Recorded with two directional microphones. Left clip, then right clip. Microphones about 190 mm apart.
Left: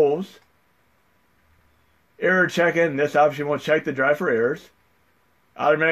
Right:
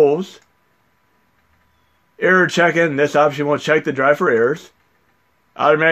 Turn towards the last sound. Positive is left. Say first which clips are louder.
# right 5 dB
turn(degrees=-45)  # may be behind; listen again after turning